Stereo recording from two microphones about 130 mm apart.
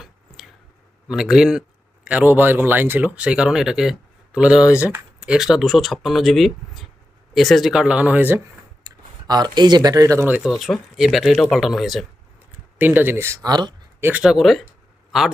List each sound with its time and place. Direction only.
0.0 s a sound: centre (ahead or behind)
1.0 s speech: 5° right (ahead or behind)
8.8 s speech: 30° right (ahead or behind); by 10.5 s 10° right (ahead or behind)
10.6 s speech: centre (ahead or behind)
12.8 s speech: 15° right (ahead or behind); by 13.7 s 35° right (ahead or behind)
14.0 s speech: 10° right (ahead or behind)